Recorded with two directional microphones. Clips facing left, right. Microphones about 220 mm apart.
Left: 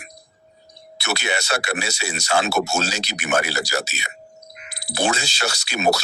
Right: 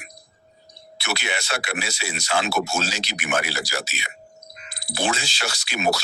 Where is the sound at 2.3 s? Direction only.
45° left (ahead or behind).